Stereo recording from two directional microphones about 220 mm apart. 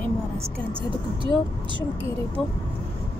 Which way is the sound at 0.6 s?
25° right (ahead or behind).